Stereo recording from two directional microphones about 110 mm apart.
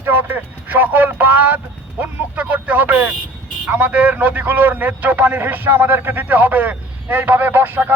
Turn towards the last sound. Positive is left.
turn(degrees=-15)  # may be behind; listen again after turning